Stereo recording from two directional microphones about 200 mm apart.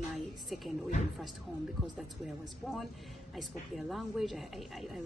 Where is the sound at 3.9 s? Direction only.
Centre (ahead or behind).